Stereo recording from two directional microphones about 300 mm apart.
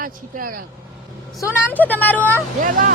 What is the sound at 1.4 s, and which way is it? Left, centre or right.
Speech, centre.